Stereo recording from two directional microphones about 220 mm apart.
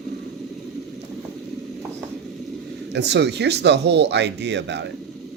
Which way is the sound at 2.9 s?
50° right (ahead or behind).